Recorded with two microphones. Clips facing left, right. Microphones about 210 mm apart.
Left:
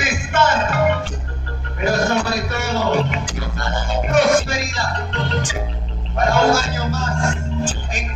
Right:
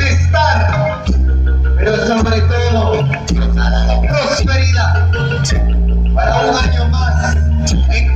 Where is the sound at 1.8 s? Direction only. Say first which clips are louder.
Right 6 dB; 45° right (ahead or behind).